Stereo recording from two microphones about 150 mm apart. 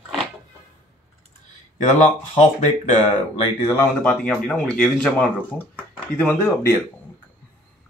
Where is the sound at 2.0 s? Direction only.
50° left (ahead or behind).